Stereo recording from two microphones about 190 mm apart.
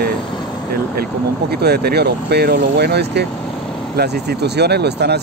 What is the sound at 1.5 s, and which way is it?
Speech, 55° right (ahead or behind).